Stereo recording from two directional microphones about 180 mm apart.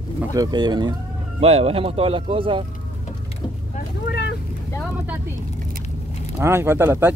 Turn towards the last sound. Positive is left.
turn(degrees=-15)  # may be behind; listen again after turning